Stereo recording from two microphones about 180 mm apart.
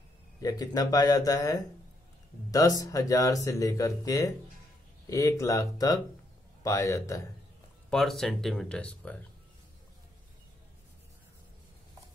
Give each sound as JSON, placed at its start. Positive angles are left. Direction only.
{"t": 0.4, "sound": "speech", "side_deg": 20}
{"t": 7.9, "sound": "speech", "side_deg": 0}